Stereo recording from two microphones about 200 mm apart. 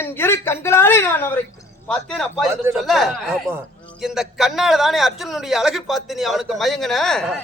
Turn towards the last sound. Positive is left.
turn(degrees=0)  # may be behind; listen again after turning